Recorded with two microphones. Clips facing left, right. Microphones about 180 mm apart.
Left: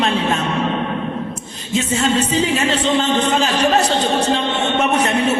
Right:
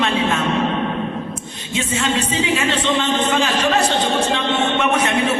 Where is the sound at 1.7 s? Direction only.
40° left (ahead or behind).